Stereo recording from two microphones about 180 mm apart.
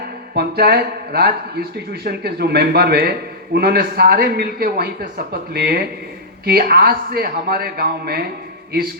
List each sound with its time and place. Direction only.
0.3 s speech: 60° right (ahead or behind)